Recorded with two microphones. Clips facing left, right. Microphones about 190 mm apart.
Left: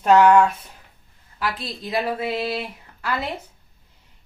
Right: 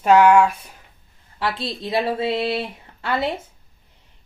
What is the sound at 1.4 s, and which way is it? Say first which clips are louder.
Speech: right 3 dB; 25° right (ahead or behind).